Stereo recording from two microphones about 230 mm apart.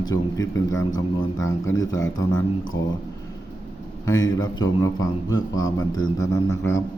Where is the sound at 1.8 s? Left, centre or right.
Centre.